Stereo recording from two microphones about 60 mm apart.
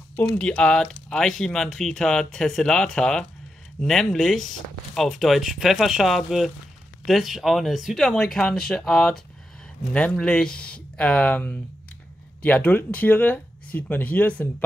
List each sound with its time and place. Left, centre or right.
0.4 s speech: centre
8.4 s speech: centre
8.6 s speech: centre
9.9 s speech: left